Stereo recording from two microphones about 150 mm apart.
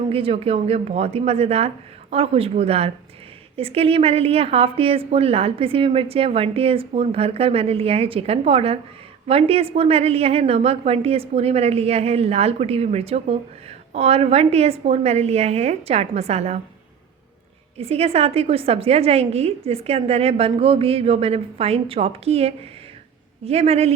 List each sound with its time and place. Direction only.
0.1 s a woman's voice: 40° right (ahead or behind)
17.7 s a woman's voice: 40° right (ahead or behind)